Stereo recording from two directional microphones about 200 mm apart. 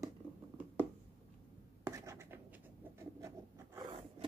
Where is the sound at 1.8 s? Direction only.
15° right (ahead or behind).